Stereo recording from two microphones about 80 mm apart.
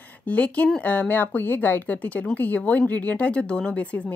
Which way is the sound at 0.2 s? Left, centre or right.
Centre.